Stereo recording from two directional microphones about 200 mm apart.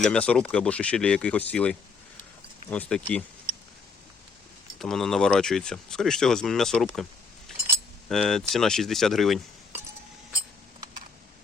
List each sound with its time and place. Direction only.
0.0 s speech: 5° left (ahead or behind)
4.8 s speech: centre (ahead or behind)